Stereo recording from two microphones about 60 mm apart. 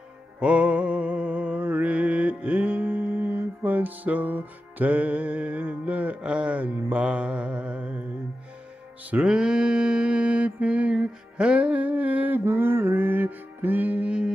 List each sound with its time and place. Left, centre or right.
0.4 s music: centre
9.2 s mantra: centre
12.4 s music: right